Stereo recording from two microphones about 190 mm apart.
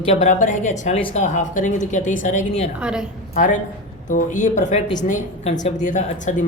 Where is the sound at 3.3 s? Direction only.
40° left (ahead or behind).